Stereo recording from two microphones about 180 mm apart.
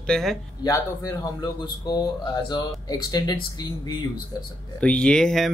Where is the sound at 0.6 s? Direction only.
20° left (ahead or behind).